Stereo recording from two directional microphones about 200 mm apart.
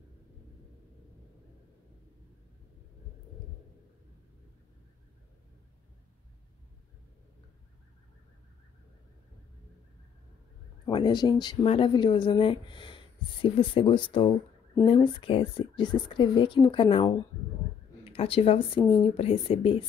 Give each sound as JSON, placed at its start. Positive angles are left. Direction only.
{"t": 10.9, "sound": "speech", "side_deg": 20}